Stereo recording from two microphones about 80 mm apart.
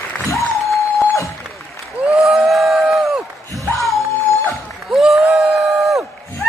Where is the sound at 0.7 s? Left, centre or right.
Left.